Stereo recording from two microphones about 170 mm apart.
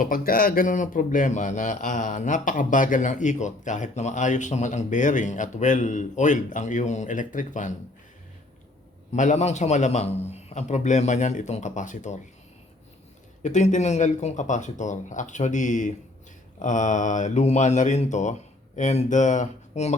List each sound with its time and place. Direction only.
0.0 s a man's voice: 55° left (ahead or behind)
9.1 s a man's voice: 45° left (ahead or behind)
13.4 s a man's voice: 45° left (ahead or behind)